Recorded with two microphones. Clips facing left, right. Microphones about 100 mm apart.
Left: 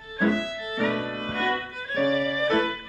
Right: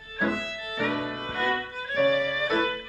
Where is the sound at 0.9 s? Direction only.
20° right (ahead or behind).